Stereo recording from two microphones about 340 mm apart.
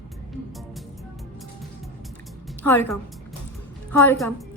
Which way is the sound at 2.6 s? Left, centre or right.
Centre.